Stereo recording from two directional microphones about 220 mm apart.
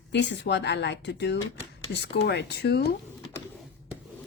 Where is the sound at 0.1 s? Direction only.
55° left (ahead or behind).